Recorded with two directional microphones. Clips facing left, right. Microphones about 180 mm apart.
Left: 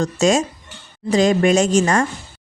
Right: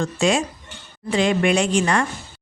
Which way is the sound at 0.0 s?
40° left (ahead or behind).